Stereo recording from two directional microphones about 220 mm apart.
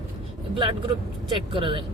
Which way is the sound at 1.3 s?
20° right (ahead or behind).